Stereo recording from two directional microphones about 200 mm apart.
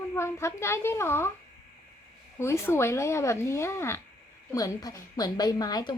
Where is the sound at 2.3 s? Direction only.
15° left (ahead or behind).